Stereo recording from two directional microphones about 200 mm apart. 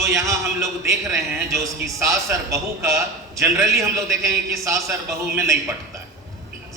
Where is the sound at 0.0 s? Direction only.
15° right (ahead or behind).